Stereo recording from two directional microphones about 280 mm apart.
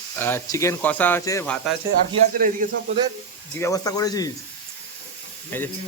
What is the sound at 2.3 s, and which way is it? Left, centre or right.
Speech, right.